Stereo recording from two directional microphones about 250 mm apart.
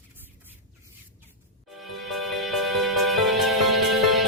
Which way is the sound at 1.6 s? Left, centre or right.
Centre.